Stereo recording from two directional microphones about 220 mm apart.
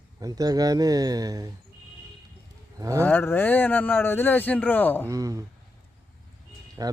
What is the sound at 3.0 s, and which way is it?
Speech, 10° left (ahead or behind).